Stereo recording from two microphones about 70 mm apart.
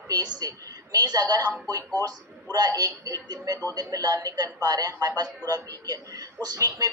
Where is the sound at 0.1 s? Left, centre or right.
Right.